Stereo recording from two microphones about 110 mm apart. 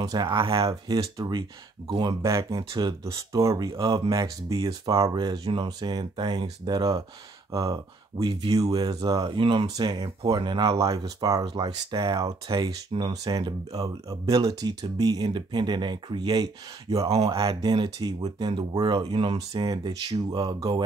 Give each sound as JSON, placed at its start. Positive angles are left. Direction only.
{"t": 0.0, "sound": "speech", "side_deg": -35}
{"t": 0.6, "sound": "speech", "side_deg": -35}
{"t": 2.2, "sound": "speech", "side_deg": -30}
{"t": 9.4, "sound": "speech", "side_deg": -50}
{"t": 19.3, "sound": "speech", "side_deg": -35}